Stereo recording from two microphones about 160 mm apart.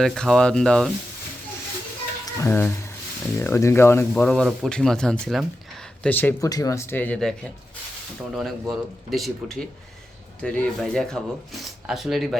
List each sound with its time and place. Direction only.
0.0 s speech: 5° left (ahead or behind)
2.4 s speech: 15° left (ahead or behind)